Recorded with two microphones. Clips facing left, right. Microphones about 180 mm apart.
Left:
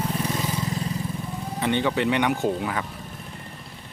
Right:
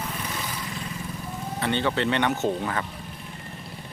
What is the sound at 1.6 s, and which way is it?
Speech, 15° left (ahead or behind).